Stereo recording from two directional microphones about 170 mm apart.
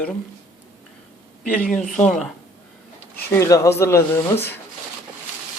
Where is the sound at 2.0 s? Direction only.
Centre (ahead or behind).